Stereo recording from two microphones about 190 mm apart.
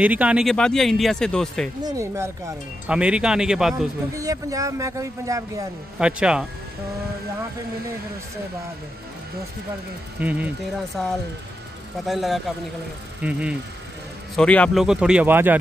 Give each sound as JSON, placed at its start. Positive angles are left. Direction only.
{"t": 0.0, "sound": "speech", "side_deg": -5}
{"t": 1.9, "sound": "speech", "side_deg": -15}
{"t": 4.1, "sound": "speech", "side_deg": -15}
{"t": 5.9, "sound": "speech", "side_deg": -5}
{"t": 10.2, "sound": "speech", "side_deg": -5}
{"t": 14.3, "sound": "speech", "side_deg": 5}